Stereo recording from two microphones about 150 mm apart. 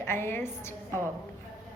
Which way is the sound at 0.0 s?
15° left (ahead or behind).